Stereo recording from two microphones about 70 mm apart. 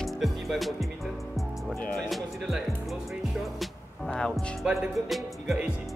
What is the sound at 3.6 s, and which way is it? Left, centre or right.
Music, centre.